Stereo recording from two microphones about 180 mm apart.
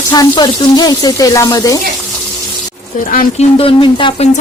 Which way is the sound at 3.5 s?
30° left (ahead or behind).